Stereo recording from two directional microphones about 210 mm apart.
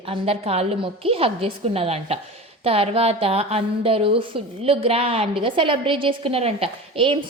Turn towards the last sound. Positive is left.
turn(degrees=-25)  # may be behind; listen again after turning